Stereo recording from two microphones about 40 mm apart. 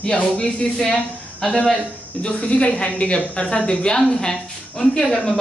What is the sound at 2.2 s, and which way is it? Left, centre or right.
A woman's voice, left.